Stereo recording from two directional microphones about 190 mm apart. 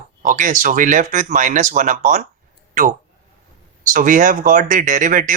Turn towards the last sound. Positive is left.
turn(degrees=-45)  # may be behind; listen again after turning